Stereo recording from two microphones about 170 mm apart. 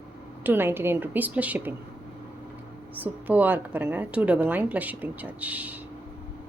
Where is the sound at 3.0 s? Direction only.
10° right (ahead or behind).